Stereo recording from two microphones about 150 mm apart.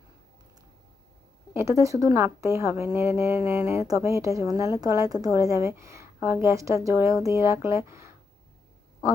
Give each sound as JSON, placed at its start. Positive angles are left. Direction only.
{"t": 1.5, "sound": "a woman's voice", "side_deg": -20}